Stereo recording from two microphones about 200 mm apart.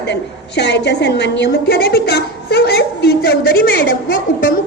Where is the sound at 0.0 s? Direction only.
60° left (ahead or behind).